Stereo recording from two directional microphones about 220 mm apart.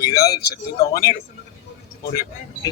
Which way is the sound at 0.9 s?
15° left (ahead or behind).